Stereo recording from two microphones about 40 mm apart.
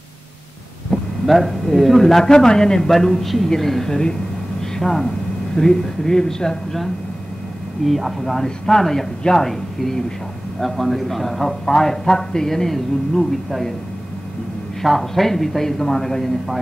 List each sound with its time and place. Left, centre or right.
1.2 s a man's voice: centre
2.9 s a man's voice: centre
7.8 s a man's voice: centre
8.5 s a man's voice: centre
14.8 s a man's voice: centre